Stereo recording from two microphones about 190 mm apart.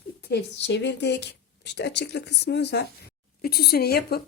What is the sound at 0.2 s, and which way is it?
Speech, 60° left (ahead or behind).